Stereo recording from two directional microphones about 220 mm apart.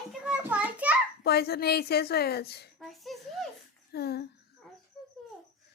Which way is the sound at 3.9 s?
45° left (ahead or behind).